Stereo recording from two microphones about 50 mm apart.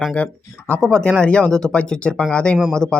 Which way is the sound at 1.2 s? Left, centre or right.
Left.